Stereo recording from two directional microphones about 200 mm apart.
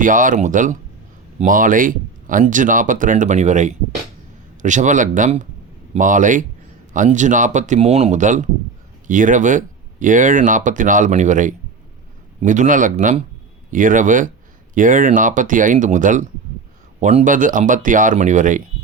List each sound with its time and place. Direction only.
0.0 s speech: 40° right (ahead or behind)